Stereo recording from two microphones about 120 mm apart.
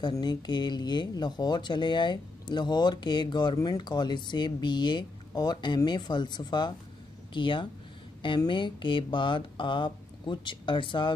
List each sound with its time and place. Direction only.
0.1 s speech: 35° left (ahead or behind)